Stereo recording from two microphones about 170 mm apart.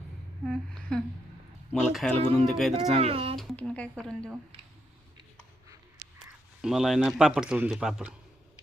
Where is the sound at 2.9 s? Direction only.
35° right (ahead or behind).